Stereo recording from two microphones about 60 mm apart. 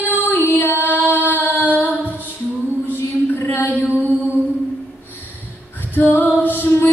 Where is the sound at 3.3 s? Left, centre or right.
Left.